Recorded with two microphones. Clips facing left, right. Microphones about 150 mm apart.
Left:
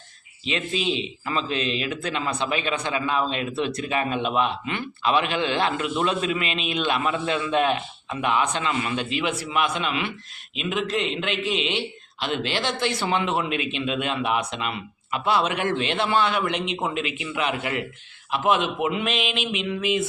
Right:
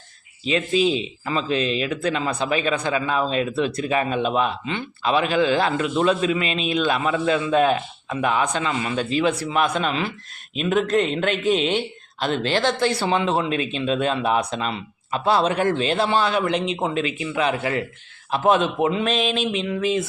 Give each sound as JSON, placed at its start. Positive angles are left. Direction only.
{"t": 0.4, "sound": "speech", "side_deg": -35}